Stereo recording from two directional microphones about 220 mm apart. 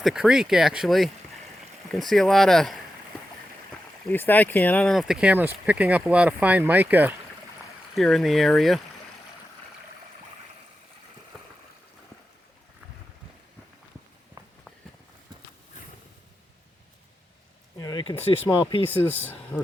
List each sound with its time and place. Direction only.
0.0 s speech: centre (ahead or behind)
4.1 s speech: 10° left (ahead or behind)
17.7 s a sound: 20° left (ahead or behind)
18.5 s speech: 5° left (ahead or behind)